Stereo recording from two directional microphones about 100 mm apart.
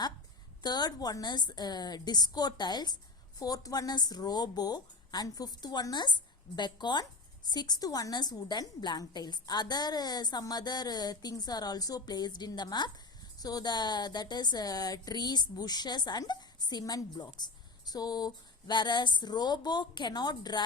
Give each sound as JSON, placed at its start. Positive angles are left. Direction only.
{"t": 0.6, "sound": "speech", "side_deg": 45}